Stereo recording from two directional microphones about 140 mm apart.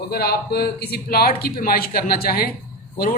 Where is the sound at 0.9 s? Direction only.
90° left.